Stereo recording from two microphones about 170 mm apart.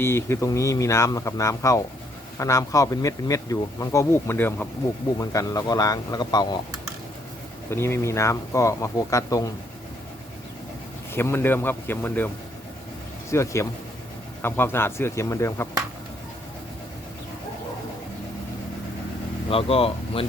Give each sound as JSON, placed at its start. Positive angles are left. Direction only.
{"t": 0.0, "sound": "speech", "side_deg": 15}
{"t": 7.7, "sound": "speech", "side_deg": 15}
{"t": 11.1, "sound": "speech", "side_deg": 15}
{"t": 13.3, "sound": "speech", "side_deg": 15}
{"t": 19.5, "sound": "speech", "side_deg": 35}